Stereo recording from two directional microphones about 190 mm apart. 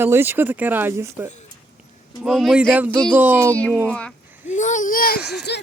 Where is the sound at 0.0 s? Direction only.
10° right (ahead or behind).